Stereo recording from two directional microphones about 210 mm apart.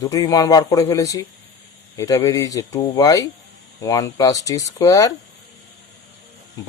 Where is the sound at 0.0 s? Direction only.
15° left (ahead or behind).